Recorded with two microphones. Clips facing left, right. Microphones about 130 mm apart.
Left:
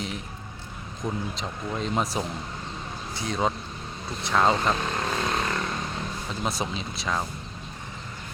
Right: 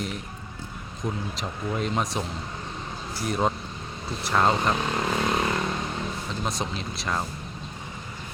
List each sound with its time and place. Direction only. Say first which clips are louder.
1.0 s speech: even; 5° right (ahead or behind)
4.7 s vehicle: right 2 dB; 15° right (ahead or behind)
6.4 s speech: left 2 dB; 5° left (ahead or behind)